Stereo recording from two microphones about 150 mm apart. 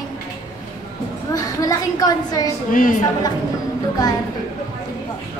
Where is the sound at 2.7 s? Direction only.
65° left (ahead or behind).